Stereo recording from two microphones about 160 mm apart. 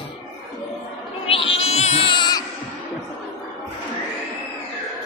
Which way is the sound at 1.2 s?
35° left (ahead or behind).